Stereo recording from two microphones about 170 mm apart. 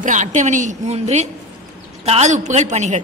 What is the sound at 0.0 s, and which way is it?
A woman's voice, 45° right (ahead or behind).